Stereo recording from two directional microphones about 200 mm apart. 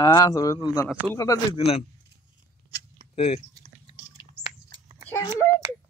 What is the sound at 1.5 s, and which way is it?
Speech, 30° left (ahead or behind).